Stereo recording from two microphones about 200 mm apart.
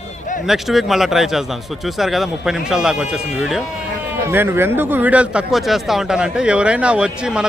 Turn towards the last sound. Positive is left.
turn(degrees=-5)  # may be behind; listen again after turning